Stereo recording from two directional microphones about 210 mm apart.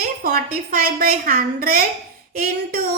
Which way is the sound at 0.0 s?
45° right (ahead or behind).